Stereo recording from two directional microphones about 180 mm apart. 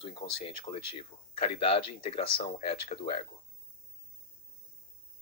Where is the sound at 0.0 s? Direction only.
30° left (ahead or behind).